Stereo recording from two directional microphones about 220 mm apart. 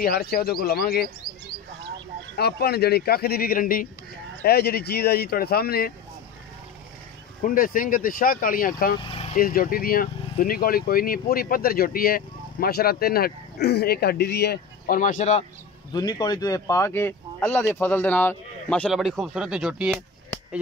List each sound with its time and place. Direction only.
0.0 s speech: 45° left (ahead or behind)
2.3 s speech: 45° left (ahead or behind)
7.4 s speech: 40° left (ahead or behind)
9.0 s vehicle: 25° left (ahead or behind)
9.4 s speech: 40° left (ahead or behind)
15.9 s speech: 20° left (ahead or behind); by 20.0 s 5° right (ahead or behind)